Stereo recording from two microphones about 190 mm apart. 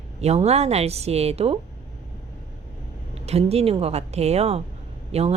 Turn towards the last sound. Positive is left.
turn(degrees=-35)  # may be behind; listen again after turning